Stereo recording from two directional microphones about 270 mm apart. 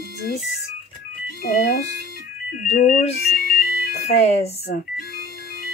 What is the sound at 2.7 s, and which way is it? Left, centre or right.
Speech, left.